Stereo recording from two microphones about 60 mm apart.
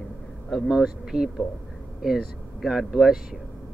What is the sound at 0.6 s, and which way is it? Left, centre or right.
Speech, centre.